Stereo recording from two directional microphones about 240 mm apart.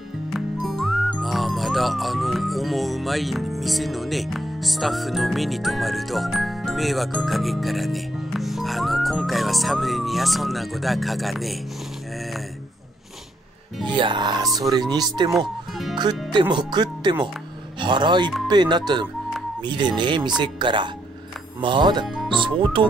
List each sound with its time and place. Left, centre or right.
0.3 s music: centre
13.9 s speech: centre
22.0 s music: centre
22.3 s speech: right